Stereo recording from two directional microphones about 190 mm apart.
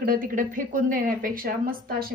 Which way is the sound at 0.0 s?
45° right (ahead or behind).